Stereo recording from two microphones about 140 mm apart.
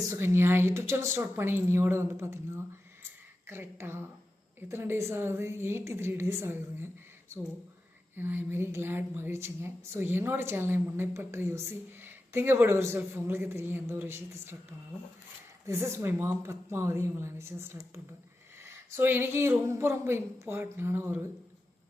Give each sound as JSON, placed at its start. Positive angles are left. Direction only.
{"t": 0.0, "sound": "a woman's voice", "side_deg": -20}